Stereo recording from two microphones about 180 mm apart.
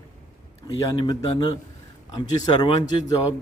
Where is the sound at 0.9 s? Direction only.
25° left (ahead or behind).